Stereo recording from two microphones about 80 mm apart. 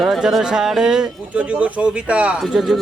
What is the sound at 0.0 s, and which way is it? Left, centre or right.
Speech, centre.